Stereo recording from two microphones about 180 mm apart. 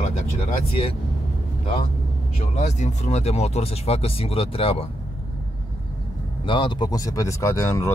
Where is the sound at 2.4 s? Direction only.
40° left (ahead or behind).